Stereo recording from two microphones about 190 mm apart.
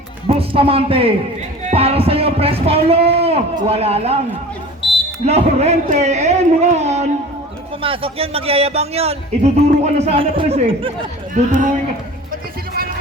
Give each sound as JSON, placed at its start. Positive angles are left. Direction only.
{"t": 0.3, "sound": "speech", "side_deg": -30}
{"t": 4.8, "sound": "buzzer", "side_deg": 25}
{"t": 5.2, "sound": "speech", "side_deg": -35}
{"t": 11.3, "sound": "speech", "side_deg": -40}
{"t": 12.3, "sound": "a sound", "side_deg": -50}